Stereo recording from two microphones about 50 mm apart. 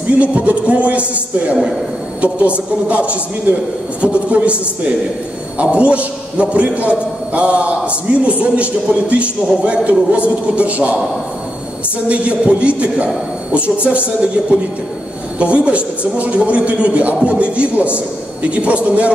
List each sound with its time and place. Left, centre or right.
0.2 s a man's voice: right
5.6 s a man's voice: right
12.1 s a man's voice: right
15.3 s a man's voice: right